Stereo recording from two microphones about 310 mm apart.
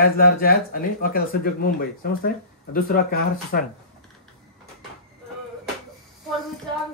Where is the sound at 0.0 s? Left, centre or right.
Left.